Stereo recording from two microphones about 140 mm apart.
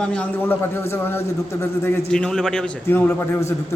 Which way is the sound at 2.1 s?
5° left (ahead or behind).